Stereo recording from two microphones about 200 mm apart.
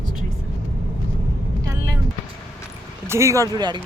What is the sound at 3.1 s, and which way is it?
Speech, 15° right (ahead or behind).